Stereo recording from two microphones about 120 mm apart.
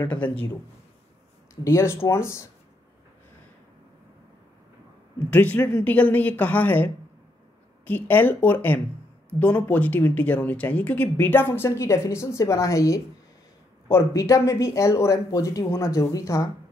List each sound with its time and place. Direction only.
1.5 s speech: 25° left (ahead or behind)
5.3 s speech: 15° left (ahead or behind)